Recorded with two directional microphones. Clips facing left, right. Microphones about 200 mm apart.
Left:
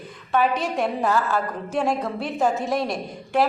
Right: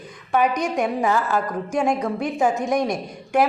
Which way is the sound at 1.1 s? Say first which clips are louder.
Right 1 dB; 10° right (ahead or behind).